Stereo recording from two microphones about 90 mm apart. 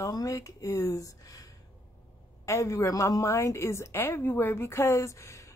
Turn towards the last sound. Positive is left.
turn(degrees=35)  # may be behind; listen again after turning